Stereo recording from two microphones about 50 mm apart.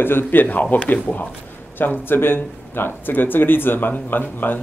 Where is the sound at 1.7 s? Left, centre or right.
Left.